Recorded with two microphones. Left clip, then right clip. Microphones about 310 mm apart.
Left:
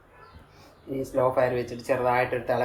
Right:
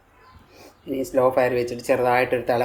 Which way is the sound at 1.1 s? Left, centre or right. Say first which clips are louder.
Right 4 dB; right.